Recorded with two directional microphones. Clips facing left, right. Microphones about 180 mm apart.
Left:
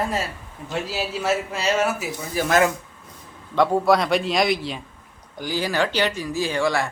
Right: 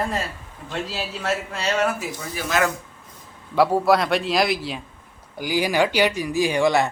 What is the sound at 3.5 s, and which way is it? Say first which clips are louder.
A man's voice: even; 5° right (ahead or behind).